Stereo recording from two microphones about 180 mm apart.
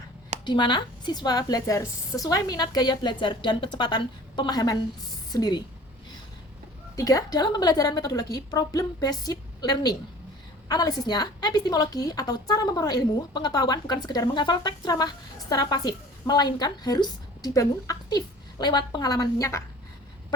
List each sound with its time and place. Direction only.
0.4 s a woman's voice: 25° left (ahead or behind)
6.9 s a woman's voice: 20° left (ahead or behind)